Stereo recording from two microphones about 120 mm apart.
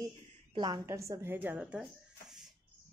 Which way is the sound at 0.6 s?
30° right (ahead or behind).